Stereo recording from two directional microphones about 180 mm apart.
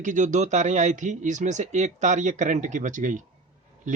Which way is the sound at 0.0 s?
45° right (ahead or behind).